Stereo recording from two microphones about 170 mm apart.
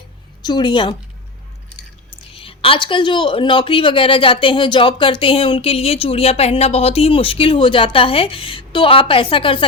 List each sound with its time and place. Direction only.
0.4 s a woman's voice: 25° left (ahead or behind)
2.3 s speech: 30° left (ahead or behind)